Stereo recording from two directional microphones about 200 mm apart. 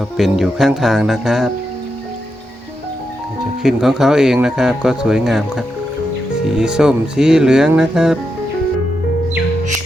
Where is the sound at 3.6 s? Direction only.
Centre (ahead or behind).